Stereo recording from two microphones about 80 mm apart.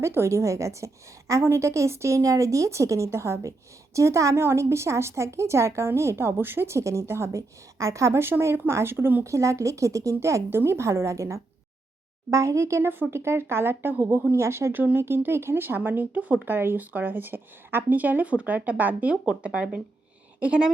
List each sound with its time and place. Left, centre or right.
0.0 s a woman's voice: right
9.2 s a woman's voice: right; by 20.7 s centre